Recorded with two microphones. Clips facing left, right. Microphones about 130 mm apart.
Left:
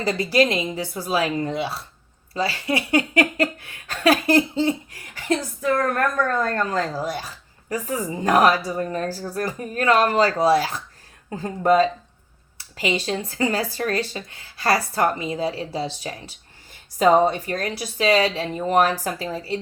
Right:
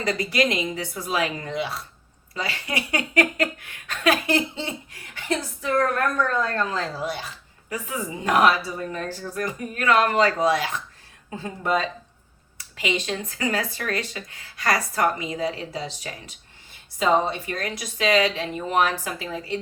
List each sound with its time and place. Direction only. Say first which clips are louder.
0.0 s speech: left 4 dB; 30° left (ahead or behind)
6.4 s speech: left 3 dB; 50° left (ahead or behind); by 16.3 s 30° left (ahead or behind)
17.0 s speech: left 5 dB; 40° left (ahead or behind)